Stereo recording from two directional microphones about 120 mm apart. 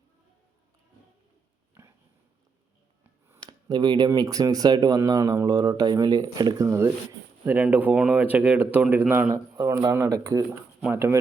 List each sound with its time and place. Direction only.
3.0 s a sound: 15° right (ahead or behind)
3.7 s speech: 35° right (ahead or behind)
7.4 s speech: 15° right (ahead or behind)
9.3 s speech: 25° right (ahead or behind)